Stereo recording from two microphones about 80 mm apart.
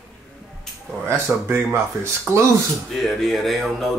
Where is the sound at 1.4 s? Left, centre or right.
Right.